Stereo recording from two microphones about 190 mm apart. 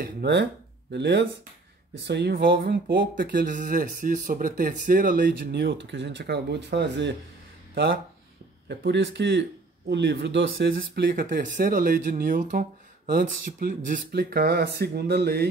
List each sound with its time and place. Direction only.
0.0 s speech: 65° right (ahead or behind)
8.6 s speech: 65° right (ahead or behind); by 10.8 s 80° right
11.1 s speech: 45° right (ahead or behind)